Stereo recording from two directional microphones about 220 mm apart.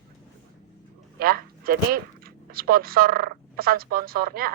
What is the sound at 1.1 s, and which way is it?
Speech, 45° right (ahead or behind).